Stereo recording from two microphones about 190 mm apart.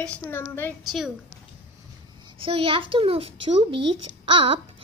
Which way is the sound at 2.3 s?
30° right (ahead or behind).